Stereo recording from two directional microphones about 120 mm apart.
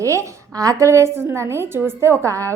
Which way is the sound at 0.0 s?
25° right (ahead or behind).